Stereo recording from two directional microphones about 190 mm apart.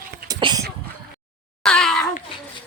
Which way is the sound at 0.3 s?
20° right (ahead or behind).